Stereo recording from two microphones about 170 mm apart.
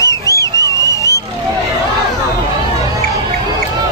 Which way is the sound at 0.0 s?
20° left (ahead or behind).